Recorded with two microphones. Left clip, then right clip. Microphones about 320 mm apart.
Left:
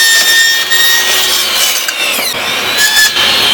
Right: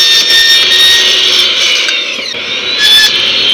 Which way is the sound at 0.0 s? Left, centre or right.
Centre.